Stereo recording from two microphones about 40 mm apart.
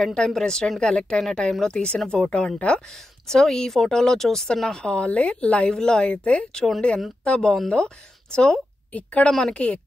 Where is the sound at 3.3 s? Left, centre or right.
Centre.